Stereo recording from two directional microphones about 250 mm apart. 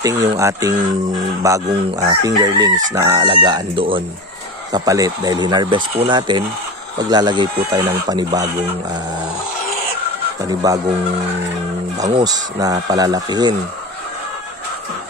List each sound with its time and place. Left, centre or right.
0.0 s speech: centre
10.4 s speech: centre
12.0 s speech: centre